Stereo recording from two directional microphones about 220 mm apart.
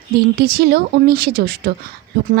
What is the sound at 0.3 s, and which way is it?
Speech, 45° right (ahead or behind).